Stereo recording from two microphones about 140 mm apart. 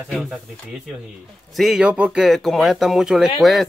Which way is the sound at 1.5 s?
Centre (ahead or behind).